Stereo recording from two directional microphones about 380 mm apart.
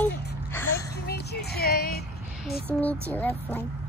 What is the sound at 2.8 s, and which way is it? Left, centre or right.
Speech, centre.